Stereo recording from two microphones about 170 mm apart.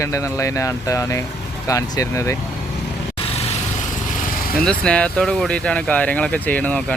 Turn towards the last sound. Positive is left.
turn(degrees=10)  # may be behind; listen again after turning